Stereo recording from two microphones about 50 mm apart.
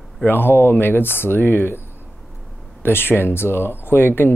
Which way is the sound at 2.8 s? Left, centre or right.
Left.